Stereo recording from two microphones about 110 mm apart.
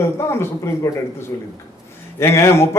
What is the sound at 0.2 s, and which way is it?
A man's voice, 25° left (ahead or behind).